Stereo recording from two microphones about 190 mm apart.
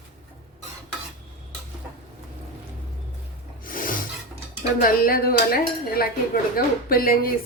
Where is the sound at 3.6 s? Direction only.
45° left (ahead or behind).